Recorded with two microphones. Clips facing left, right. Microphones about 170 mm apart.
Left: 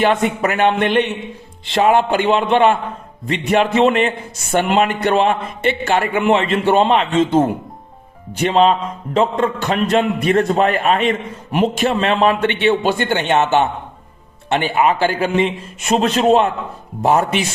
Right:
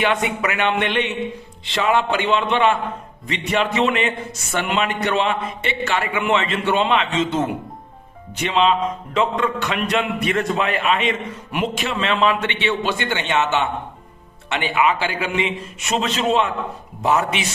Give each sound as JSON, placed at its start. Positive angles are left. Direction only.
{"t": 0.0, "sound": "a man's voice", "side_deg": 40}